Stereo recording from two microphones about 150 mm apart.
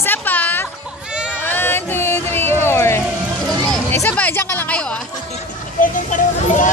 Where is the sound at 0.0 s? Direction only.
15° left (ahead or behind).